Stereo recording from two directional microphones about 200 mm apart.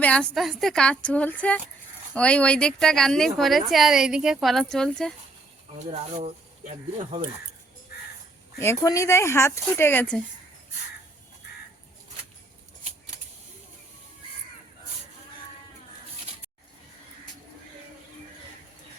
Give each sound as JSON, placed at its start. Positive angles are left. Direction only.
{"t": 0.0, "sound": "speech", "side_deg": 5}
{"t": 5.9, "sound": "speech", "side_deg": -30}
{"t": 8.5, "sound": "speech", "side_deg": 15}